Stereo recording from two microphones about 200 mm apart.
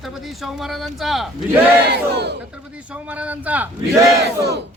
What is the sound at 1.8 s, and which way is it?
Battle cry, 55° right (ahead or behind).